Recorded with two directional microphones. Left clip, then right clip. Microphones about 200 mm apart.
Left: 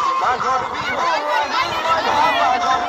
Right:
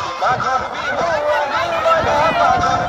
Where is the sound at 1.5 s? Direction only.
40° right (ahead or behind).